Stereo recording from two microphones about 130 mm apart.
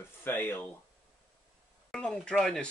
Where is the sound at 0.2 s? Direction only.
15° left (ahead or behind).